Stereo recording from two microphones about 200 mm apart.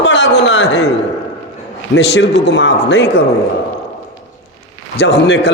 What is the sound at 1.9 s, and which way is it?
A man's voice, 60° left (ahead or behind).